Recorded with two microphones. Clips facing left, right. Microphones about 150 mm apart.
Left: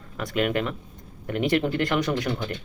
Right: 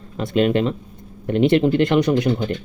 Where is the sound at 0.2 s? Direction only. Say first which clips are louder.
Right 7 dB; 25° right (ahead or behind).